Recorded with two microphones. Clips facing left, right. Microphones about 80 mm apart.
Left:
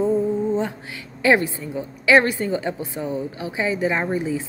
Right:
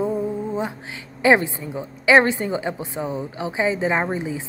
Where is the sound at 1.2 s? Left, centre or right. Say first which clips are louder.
Right 1 dB; right.